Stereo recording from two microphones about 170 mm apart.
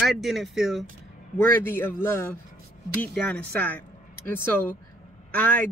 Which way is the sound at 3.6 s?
10° left (ahead or behind).